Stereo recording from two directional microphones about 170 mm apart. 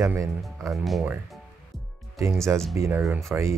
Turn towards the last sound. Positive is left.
turn(degrees=-15)  # may be behind; listen again after turning